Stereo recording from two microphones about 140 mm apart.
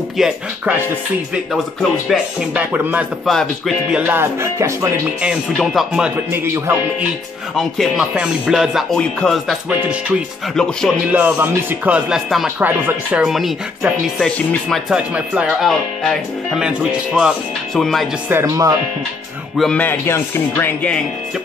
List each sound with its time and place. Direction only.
0.2 s speech: 5° right (ahead or behind)
2.5 s speech: 10° right (ahead or behind)
3.3 s speech: centre (ahead or behind)
4.0 s music: 15° right (ahead or behind)
5.5 s speech: centre (ahead or behind)
6.3 s music: 20° right (ahead or behind)
7.5 s speech: centre (ahead or behind)
9.8 s speech: 10° right (ahead or behind)
10.5 s speech: 5° left (ahead or behind)
11.1 s speech: 10° right (ahead or behind)
18.3 s music: 20° right (ahead or behind)
19.5 s a man's voice: centre (ahead or behind)
19.8 s speech: 15° left (ahead or behind)